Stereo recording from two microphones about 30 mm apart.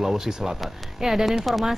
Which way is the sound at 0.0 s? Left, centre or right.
Centre.